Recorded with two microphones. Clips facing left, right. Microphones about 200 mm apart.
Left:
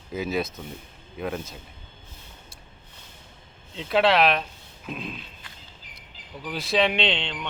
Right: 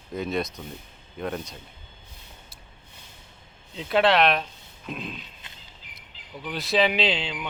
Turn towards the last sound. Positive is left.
turn(degrees=-5)  # may be behind; listen again after turning